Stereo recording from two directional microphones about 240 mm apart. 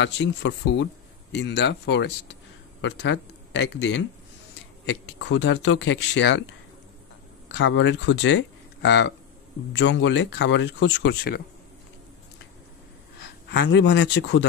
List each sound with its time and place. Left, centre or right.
0.0 s speech: left
7.5 s speech: left
13.5 s speech: left